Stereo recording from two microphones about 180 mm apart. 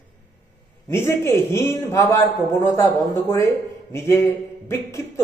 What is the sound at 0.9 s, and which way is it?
Speech, 15° left (ahead or behind).